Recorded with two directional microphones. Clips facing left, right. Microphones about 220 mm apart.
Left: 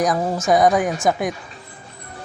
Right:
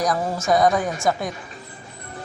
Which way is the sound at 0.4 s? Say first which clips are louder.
Left 2 dB; 20° left (ahead or behind).